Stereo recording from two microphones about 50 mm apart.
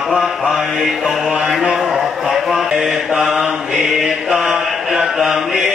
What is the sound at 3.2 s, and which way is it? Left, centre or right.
Mantra, centre.